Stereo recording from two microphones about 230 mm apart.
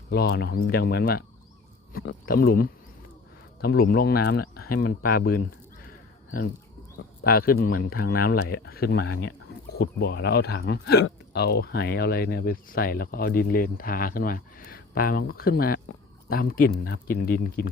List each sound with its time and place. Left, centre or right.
0.1 s speech: left
2.2 s speech: left
7.2 s speech: left